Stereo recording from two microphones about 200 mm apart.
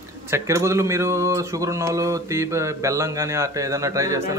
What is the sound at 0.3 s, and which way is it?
A man's voice, 15° right (ahead or behind).